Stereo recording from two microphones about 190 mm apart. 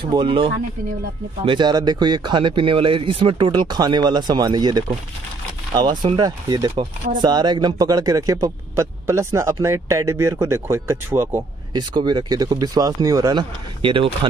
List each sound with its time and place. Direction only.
0.0 s speech: 25° right (ahead or behind)